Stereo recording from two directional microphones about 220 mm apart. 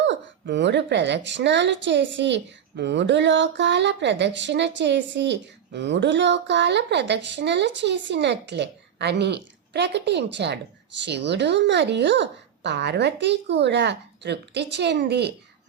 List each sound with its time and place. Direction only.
0.1 s a woman's voice: 50° right (ahead or behind)